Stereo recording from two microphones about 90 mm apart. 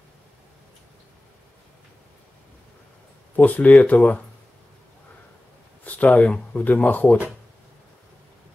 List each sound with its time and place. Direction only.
3.3 s speech: 20° left (ahead or behind)
5.9 s speech: 15° left (ahead or behind)